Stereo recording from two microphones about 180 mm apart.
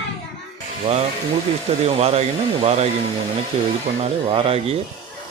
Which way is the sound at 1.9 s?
35° right (ahead or behind).